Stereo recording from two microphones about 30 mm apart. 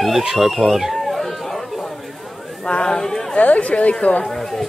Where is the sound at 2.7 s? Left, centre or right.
Left.